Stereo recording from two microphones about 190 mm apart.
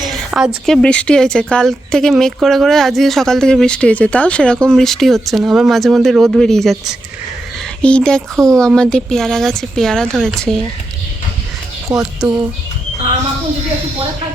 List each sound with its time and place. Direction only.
0.3 s speech: 5° right (ahead or behind)
11.9 s speech: 20° right (ahead or behind)